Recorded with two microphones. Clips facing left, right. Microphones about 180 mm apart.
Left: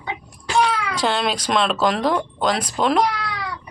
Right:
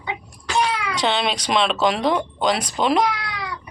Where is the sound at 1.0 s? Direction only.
Centre (ahead or behind).